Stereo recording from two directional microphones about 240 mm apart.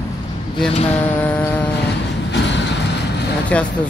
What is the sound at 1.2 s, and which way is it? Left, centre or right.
Speech, centre.